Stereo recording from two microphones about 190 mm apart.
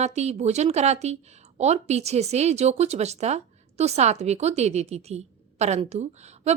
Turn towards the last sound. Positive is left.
turn(degrees=-35)  # may be behind; listen again after turning